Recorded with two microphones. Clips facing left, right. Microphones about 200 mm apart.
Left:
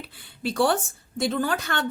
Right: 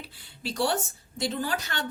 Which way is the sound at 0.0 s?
60° left (ahead or behind).